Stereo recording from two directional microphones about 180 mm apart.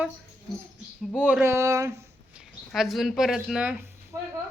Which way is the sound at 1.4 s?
15° right (ahead or behind).